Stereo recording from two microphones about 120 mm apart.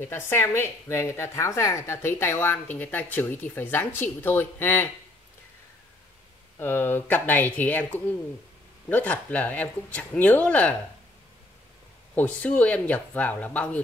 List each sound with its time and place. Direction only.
0.0 s a woman's voice: 20° left (ahead or behind)
6.6 s speech: 20° left (ahead or behind)
12.2 s speech: 15° left (ahead or behind)